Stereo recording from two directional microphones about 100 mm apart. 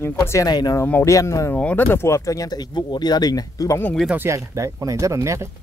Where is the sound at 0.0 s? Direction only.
25° left (ahead or behind).